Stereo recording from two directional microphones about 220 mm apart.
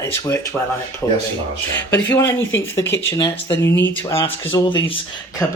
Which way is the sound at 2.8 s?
55° left (ahead or behind).